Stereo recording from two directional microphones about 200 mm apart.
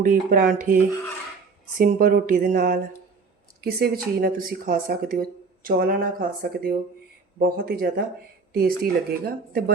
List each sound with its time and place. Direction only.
0.0 s speech: 45° right (ahead or behind)
1.8 s speech: 40° right (ahead or behind)